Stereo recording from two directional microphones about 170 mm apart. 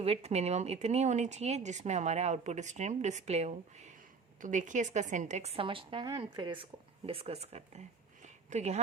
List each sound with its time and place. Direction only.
0.0 s a woman's voice: 40° right (ahead or behind)